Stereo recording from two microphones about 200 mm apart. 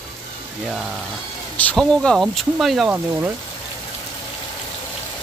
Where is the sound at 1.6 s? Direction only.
5° left (ahead or behind).